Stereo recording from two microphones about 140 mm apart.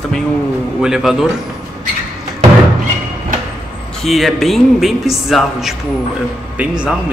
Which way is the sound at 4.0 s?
Centre (ahead or behind).